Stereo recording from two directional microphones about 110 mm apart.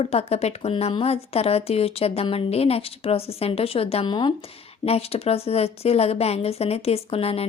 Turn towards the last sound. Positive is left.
turn(degrees=60)  # may be behind; listen again after turning